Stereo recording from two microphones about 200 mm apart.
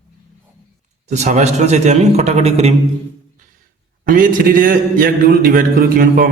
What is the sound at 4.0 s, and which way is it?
A man's voice, 45° right (ahead or behind).